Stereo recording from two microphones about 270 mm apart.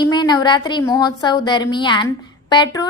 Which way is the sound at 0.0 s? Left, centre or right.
Centre.